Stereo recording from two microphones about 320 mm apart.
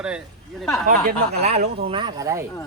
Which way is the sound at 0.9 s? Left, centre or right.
Right.